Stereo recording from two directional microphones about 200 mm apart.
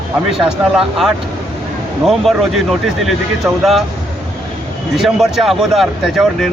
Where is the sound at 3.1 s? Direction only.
Centre (ahead or behind).